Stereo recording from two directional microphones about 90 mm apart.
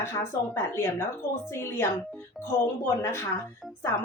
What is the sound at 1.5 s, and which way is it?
A woman's voice, 30° left (ahead or behind).